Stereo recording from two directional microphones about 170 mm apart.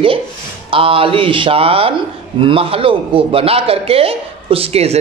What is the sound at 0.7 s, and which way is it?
Speech, 35° right (ahead or behind).